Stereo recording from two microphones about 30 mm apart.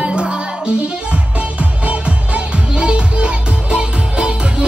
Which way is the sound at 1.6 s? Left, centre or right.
Right.